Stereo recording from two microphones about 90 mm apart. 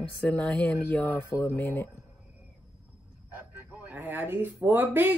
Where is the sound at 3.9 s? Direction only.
20° right (ahead or behind).